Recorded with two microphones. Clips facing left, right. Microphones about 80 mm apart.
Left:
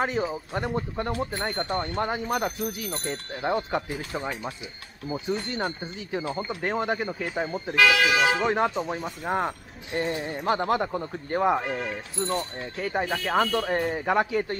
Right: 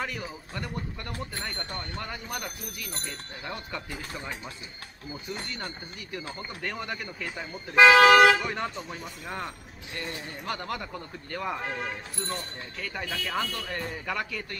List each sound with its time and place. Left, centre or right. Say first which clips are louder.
0.0 s speech: left 8 dB; left
4.1 s speech: left 8 dB; left
6.6 s speech: left 8 dB; left
7.7 s speech: right 5 dB; right
8.0 s speech: right 6 dB; right
8.4 s speech: left 8 dB; left
8.7 s speech: left 8 dB; left
12.7 s speech: left 9 dB; left
13.1 s speech: left 7 dB; left
14.0 s speech: left 9 dB; left